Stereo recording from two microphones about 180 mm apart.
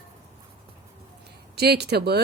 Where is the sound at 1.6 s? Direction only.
65° right (ahead or behind).